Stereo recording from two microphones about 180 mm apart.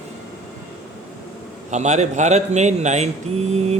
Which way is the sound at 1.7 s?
40° right (ahead or behind).